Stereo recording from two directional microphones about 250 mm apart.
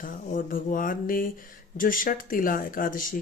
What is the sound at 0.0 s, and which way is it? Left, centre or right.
Speech, left.